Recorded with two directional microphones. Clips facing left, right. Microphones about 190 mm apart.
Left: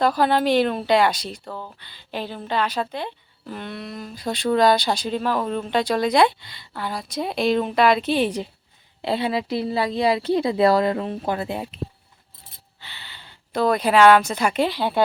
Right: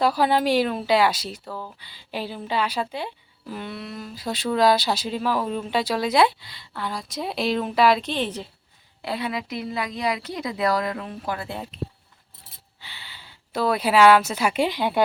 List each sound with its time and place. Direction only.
0.0 s a woman's voice: 10° right (ahead or behind); by 8.4 s 10° left (ahead or behind)
9.0 s a woman's voice: 25° left (ahead or behind)
12.8 s speech: 10° right (ahead or behind)